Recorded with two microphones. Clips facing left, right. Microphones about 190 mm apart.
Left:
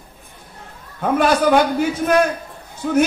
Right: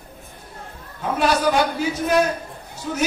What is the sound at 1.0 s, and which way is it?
A man's voice, 55° left (ahead or behind).